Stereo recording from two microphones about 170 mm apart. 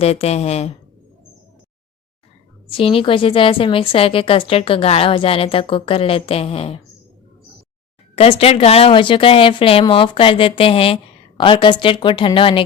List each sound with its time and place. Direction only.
0.0 s speech: 35° left (ahead or behind)
2.6 s speech: 30° left (ahead or behind)
8.1 s speech: 35° left (ahead or behind)